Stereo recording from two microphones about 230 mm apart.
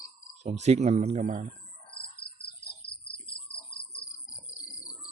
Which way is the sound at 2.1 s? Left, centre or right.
Left.